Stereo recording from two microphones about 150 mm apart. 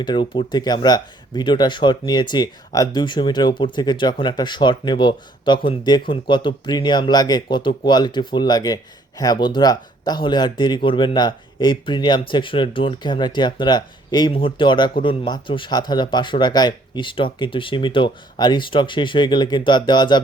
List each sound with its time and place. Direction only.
0.0 s speech: 30° left (ahead or behind)